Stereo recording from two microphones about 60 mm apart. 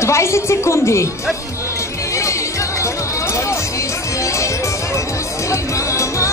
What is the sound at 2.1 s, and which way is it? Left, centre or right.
Music, left.